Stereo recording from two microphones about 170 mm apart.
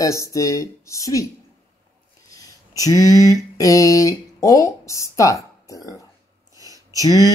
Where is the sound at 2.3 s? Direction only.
20° left (ahead or behind).